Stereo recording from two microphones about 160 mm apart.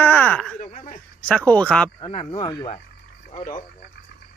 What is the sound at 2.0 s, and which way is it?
Speech, 35° left (ahead or behind).